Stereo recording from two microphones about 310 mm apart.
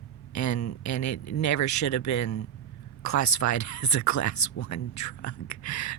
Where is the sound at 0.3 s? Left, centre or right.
Left.